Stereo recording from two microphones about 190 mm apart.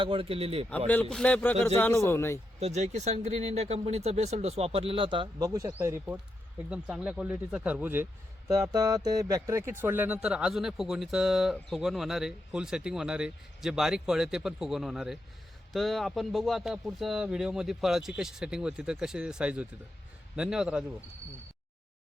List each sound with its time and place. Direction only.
0.0 s speech: 30° right (ahead or behind)
1.1 s speech: 5° left (ahead or behind)
2.6 s speech: 35° right (ahead or behind)
5.7 s speech: 10° right (ahead or behind)